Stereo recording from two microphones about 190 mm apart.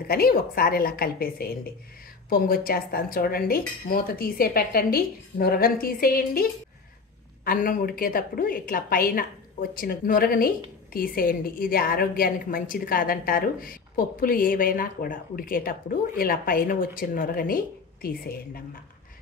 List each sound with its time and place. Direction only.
0.1 s a woman's voice: 50° left (ahead or behind)